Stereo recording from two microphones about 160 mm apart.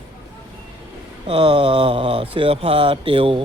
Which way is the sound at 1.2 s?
35° right (ahead or behind).